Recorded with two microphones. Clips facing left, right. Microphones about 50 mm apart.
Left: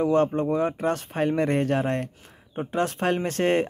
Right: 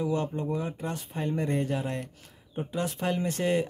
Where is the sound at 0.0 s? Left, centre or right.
Left.